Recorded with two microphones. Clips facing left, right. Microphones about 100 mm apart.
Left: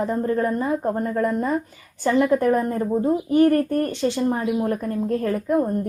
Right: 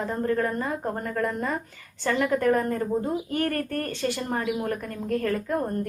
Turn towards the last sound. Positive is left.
turn(degrees=15)  # may be behind; listen again after turning